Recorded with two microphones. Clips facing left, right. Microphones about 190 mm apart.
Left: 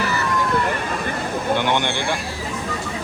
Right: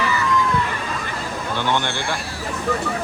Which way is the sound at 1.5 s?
15° left (ahead or behind).